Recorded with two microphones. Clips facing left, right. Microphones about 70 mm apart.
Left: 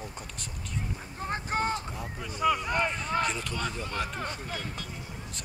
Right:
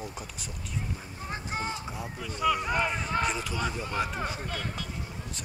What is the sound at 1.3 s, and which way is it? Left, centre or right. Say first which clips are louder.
Speech: left 4 dB; left.